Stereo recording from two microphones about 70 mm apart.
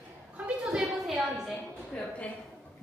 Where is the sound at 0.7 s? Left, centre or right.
Centre.